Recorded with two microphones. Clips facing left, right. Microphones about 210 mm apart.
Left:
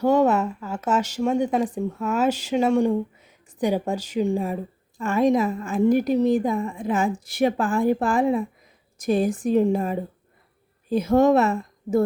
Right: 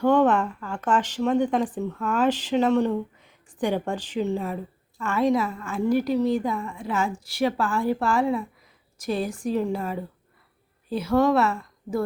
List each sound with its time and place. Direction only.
0.0 s a woman's voice: 10° left (ahead or behind)